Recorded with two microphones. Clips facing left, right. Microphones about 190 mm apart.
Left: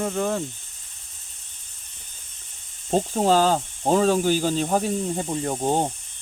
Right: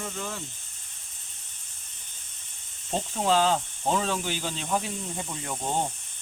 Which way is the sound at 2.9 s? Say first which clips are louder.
Left 6 dB; 40° left (ahead or behind).